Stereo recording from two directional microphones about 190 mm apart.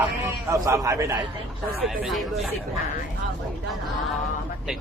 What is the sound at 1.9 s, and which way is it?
Speech, centre (ahead or behind).